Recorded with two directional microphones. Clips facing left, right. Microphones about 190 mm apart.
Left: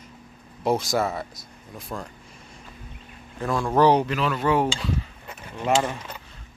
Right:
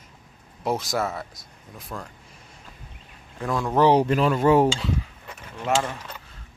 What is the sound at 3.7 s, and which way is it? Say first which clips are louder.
Speech: even; 20° right (ahead or behind).